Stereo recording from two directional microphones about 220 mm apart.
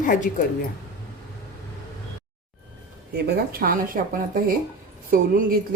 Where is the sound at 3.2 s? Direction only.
40° right (ahead or behind).